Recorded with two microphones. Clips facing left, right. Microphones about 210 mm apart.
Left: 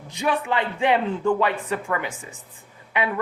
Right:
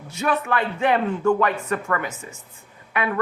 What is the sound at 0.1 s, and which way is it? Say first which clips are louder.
Speech: right 1 dB; 15° left (ahead or behind).